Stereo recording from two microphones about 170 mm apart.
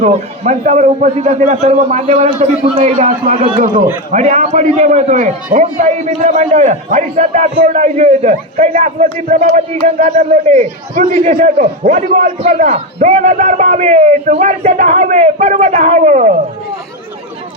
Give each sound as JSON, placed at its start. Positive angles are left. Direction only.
{"t": 0.0, "sound": "a man's voice", "side_deg": -40}